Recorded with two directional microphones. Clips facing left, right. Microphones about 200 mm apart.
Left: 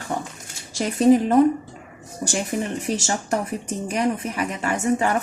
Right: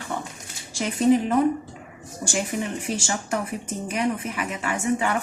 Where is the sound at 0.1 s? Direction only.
40° left (ahead or behind).